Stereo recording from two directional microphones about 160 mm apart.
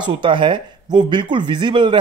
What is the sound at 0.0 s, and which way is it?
Speech, 30° right (ahead or behind).